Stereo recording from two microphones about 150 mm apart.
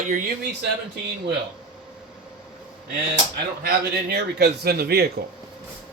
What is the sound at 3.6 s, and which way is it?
A man's voice, 90° right.